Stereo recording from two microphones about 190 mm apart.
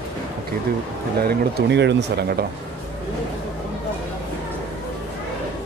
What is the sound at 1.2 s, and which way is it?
Speech, 65° right (ahead or behind).